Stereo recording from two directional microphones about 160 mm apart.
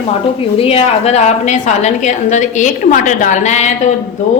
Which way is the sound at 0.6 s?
35° left (ahead or behind).